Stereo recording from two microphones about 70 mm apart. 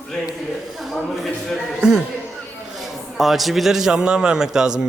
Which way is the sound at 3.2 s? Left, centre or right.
Centre.